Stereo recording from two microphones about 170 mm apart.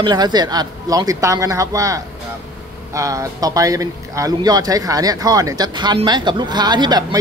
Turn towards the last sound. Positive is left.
turn(degrees=-25)  # may be behind; listen again after turning